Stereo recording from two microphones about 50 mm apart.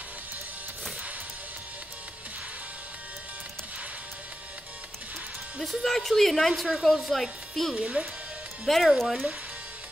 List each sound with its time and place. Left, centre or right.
5.6 s a woman's voice: centre
7.7 s speech: right
8.6 s a woman's voice: centre